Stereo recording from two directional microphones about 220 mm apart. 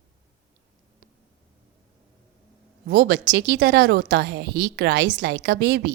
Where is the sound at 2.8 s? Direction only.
50° right (ahead or behind).